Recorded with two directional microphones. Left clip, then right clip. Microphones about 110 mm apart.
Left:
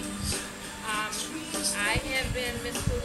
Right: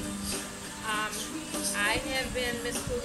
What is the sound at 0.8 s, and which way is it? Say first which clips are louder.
Music: even; centre (ahead or behind).